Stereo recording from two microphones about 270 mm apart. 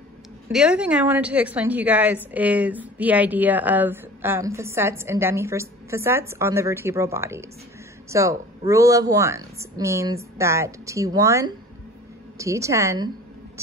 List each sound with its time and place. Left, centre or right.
0.5 s a woman's voice: centre